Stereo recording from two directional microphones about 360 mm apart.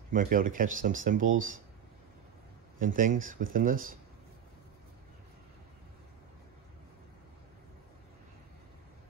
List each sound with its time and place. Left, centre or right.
0.1 s speech: right
2.8 s speech: right